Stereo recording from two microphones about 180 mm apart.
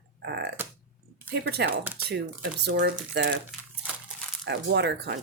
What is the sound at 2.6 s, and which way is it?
Speech, 65° right (ahead or behind).